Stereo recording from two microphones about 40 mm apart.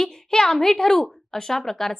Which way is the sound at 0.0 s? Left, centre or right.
Centre.